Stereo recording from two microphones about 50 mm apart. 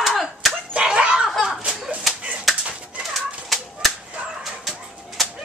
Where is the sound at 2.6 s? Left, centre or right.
Right.